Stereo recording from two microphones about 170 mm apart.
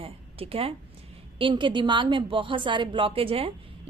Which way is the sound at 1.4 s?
30° right (ahead or behind).